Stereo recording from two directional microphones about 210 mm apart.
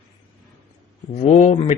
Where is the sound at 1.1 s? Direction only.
30° left (ahead or behind).